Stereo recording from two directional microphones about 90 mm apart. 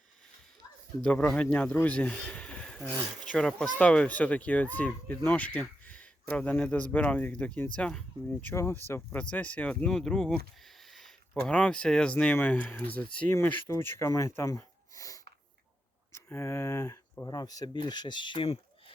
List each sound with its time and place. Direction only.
1.0 s speech: 10° left (ahead or behind)
8.5 s speech: 25° left (ahead or behind); by 18.4 s 60° left (ahead or behind)